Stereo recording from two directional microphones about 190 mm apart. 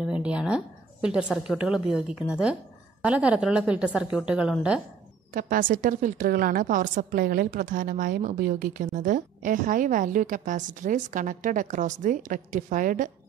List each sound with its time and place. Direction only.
0.0 s a woman's voice: 5° right (ahead or behind)
5.3 s a woman's voice: 45° right (ahead or behind)